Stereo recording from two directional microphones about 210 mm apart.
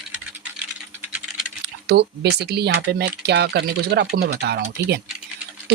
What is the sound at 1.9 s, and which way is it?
Speech, 50° right (ahead or behind).